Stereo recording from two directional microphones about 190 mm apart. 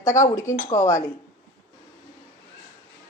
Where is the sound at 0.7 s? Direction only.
15° left (ahead or behind).